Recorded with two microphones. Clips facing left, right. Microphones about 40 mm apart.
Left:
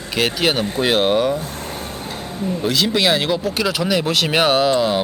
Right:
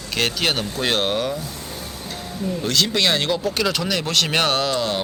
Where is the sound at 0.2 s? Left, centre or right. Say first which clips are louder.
Left 4 dB; centre.